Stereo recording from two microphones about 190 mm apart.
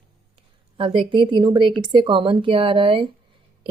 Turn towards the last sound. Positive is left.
turn(degrees=-25)  # may be behind; listen again after turning